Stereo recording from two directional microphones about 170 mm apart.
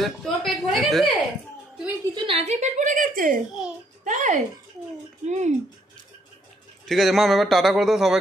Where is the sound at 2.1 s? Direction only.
35° right (ahead or behind).